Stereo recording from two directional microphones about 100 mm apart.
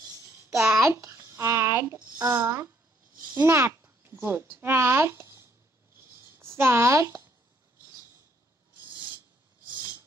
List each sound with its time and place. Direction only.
0.6 s a child's voice: 25° right (ahead or behind)
5.9 s writing: 25° right (ahead or behind)